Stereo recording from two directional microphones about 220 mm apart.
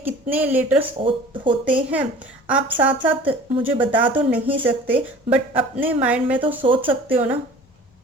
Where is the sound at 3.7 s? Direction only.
10° right (ahead or behind).